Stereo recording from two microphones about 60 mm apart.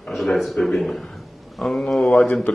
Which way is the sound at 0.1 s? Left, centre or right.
Centre.